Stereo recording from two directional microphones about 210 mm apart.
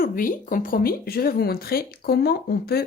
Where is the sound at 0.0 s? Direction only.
40° left (ahead or behind).